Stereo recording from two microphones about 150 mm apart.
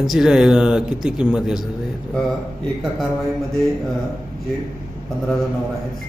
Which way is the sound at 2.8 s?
Centre (ahead or behind).